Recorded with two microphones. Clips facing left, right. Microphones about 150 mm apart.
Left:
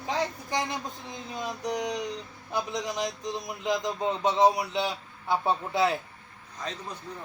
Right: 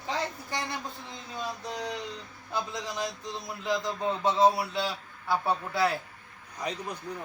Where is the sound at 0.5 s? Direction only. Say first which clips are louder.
Left 4 dB; 20° left (ahead or behind).